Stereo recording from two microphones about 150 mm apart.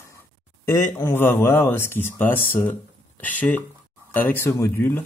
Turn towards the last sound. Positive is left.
turn(degrees=15)  # may be behind; listen again after turning